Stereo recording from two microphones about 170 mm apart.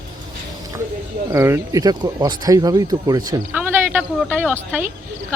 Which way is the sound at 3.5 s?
10° right (ahead or behind).